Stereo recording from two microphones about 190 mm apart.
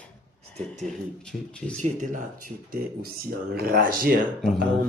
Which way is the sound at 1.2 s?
5° left (ahead or behind).